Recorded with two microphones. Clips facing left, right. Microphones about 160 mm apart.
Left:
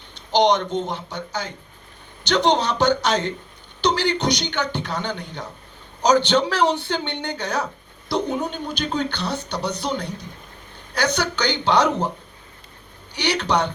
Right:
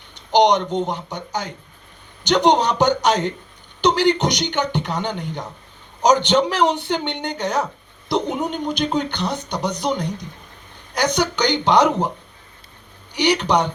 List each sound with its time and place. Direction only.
0.1 s a man's voice: 15° right (ahead or behind)
13.1 s a man's voice: 15° right (ahead or behind)